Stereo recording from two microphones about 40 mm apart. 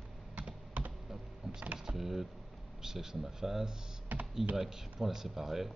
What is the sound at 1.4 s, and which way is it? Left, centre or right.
Vehicle, centre.